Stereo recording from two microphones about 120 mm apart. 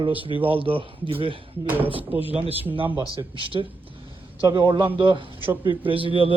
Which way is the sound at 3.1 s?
45° right (ahead or behind).